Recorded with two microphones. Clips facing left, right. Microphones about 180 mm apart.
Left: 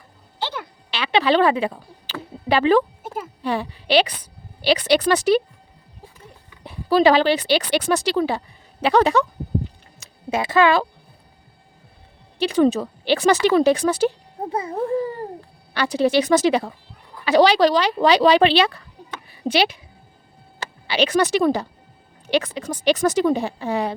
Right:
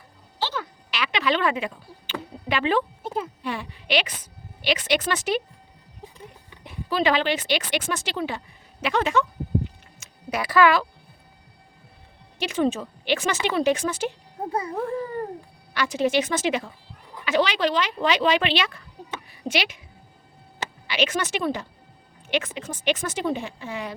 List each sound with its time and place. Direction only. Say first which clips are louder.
0.3 s music: even; 15° left (ahead or behind)
0.9 s speech: left 7 dB; 30° left (ahead or behind)
6.6 s speech: left 8 dB; 35° left (ahead or behind)
10.0 s a sound: left 5 dB; 25° left (ahead or behind)
12.4 s speech: left 6 dB; 35° left (ahead or behind)
14.5 s babbling: left 4 dB; 25° left (ahead or behind)
15.7 s speech: left 4 dB; 35° left (ahead or behind)
19.3 s a sound: left 8 dB; 30° left (ahead or behind)
20.8 s speech: left 7 dB; 35° left (ahead or behind)